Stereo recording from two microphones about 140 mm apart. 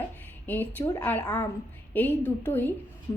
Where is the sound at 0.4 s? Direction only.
15° left (ahead or behind).